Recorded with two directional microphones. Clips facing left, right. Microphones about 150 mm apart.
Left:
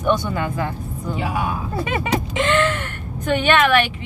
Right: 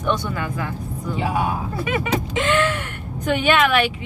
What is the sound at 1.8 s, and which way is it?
Speech, 35° left (ahead or behind).